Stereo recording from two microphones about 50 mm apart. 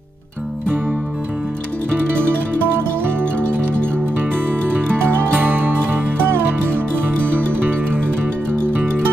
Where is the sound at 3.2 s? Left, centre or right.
Left.